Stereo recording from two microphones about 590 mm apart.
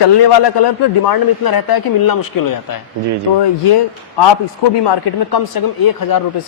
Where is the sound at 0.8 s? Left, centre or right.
Left.